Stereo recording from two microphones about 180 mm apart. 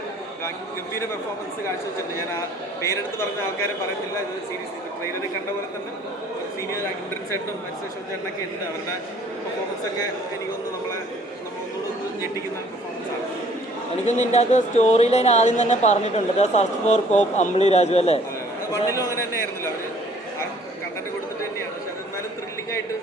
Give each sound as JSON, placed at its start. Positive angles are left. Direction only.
{"t": 2.8, "sound": "speech", "side_deg": 15}
{"t": 14.1, "sound": "speech", "side_deg": 40}